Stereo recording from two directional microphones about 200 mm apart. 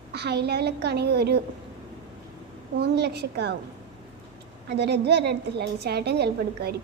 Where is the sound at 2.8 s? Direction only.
55° right (ahead or behind).